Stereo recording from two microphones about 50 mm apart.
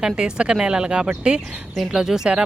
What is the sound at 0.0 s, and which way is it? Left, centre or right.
Speech, centre.